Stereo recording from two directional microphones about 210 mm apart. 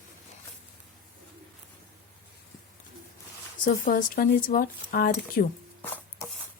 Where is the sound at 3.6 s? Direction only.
40° left (ahead or behind).